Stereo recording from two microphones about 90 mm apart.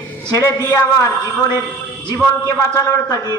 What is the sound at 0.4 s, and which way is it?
Speech, 40° left (ahead or behind).